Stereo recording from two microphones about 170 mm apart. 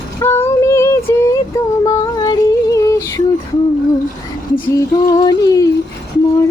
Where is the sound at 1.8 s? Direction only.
20° left (ahead or behind).